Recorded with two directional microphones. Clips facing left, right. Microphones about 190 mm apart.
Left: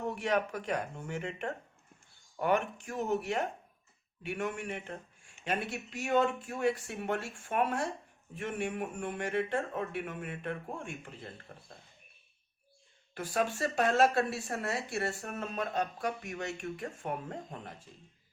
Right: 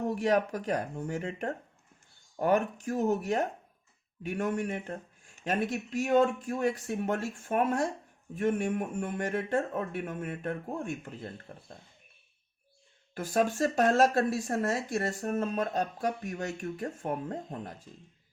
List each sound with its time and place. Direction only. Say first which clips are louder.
0.1 s a man's voice: right 4 dB; 40° right (ahead or behind)
13.1 s a man's voice: right 5 dB; 45° right (ahead or behind)